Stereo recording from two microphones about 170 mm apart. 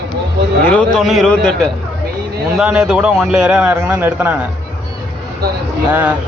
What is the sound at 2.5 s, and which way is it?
A man's voice, 5° right (ahead or behind).